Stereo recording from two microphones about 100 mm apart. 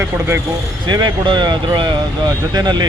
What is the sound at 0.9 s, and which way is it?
Speech, 50° right (ahead or behind).